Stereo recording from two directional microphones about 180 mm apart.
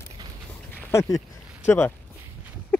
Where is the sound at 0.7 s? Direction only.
15° left (ahead or behind).